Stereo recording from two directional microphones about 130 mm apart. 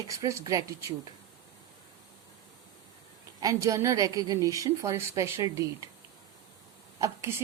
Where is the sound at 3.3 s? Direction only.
25° right (ahead or behind).